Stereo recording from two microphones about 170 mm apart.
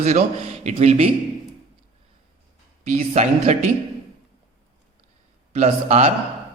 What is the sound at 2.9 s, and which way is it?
Speech, 40° right (ahead or behind).